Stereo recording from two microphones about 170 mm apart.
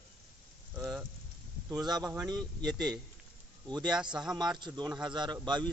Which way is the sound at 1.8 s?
25° right (ahead or behind).